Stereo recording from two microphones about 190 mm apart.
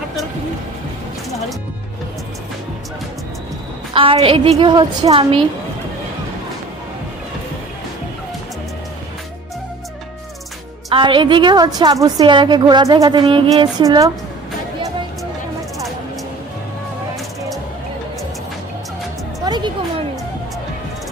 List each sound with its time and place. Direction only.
3.9 s a woman's voice: 30° right (ahead or behind)
10.9 s a woman's voice: 25° right (ahead or behind)
19.5 s music: 25° right (ahead or behind)